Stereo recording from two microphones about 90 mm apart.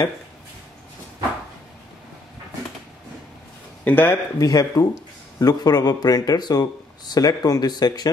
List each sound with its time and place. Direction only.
3.8 s speech: 20° left (ahead or behind)
4.4 s speech: 40° left (ahead or behind)